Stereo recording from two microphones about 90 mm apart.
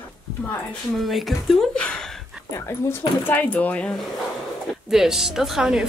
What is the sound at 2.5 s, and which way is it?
Speech, 30° left (ahead or behind).